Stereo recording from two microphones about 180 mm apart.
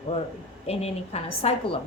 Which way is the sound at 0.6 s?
35° left (ahead or behind).